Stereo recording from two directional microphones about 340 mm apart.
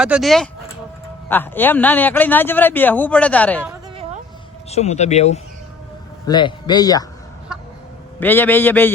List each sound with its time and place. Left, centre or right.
0.0 s a man's voice: centre
3.7 s a sound: centre
4.7 s speech: centre
7.5 s chicken: centre
8.2 s a man's voice: centre